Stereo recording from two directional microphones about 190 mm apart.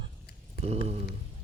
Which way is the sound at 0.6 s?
35° right (ahead or behind).